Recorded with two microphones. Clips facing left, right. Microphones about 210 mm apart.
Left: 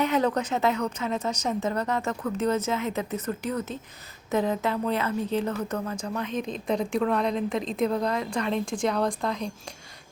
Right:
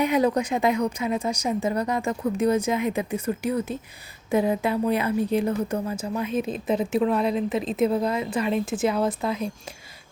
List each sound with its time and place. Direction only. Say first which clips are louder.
0.0 s a woman's voice: right 3 dB; 10° right (ahead or behind)